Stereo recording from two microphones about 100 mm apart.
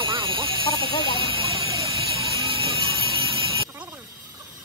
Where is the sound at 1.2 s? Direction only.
65° right (ahead or behind).